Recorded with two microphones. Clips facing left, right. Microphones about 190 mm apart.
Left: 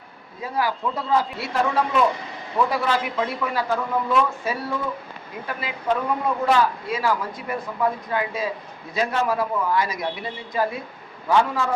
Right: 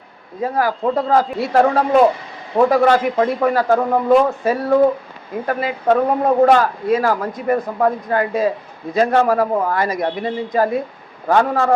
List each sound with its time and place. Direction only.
0.4 s a man's voice: 50° right (ahead or behind)